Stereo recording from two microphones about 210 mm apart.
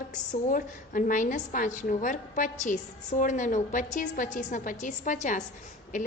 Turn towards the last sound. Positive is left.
turn(degrees=35)  # may be behind; listen again after turning